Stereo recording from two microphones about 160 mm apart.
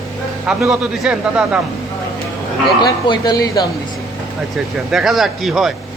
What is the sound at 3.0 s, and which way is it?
Speech, 25° left (ahead or behind).